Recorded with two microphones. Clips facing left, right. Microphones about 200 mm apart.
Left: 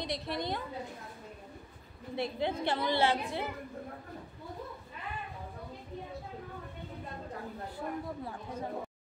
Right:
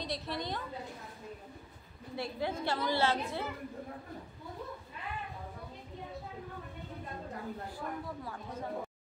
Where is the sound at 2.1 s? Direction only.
20° left (ahead or behind).